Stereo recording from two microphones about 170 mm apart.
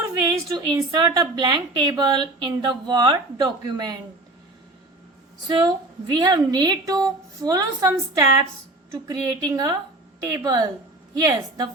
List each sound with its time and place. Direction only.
0.4 s a woman's voice: 25° right (ahead or behind)
5.5 s a woman's voice: 25° right (ahead or behind)